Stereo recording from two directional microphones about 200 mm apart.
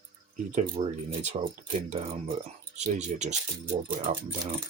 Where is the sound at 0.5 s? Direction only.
30° right (ahead or behind).